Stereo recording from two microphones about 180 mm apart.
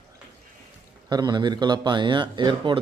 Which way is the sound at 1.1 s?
25° right (ahead or behind).